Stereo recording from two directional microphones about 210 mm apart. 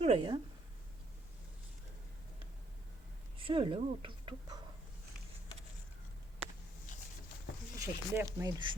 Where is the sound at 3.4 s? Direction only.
25° right (ahead or behind).